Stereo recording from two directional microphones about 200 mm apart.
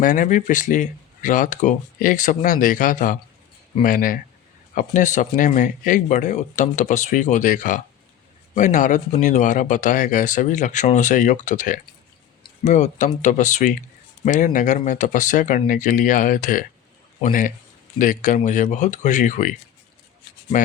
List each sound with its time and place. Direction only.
0.0 s speech: 40° left (ahead or behind)